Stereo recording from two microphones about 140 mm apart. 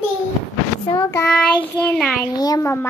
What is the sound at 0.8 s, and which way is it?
Child singing, 25° left (ahead or behind).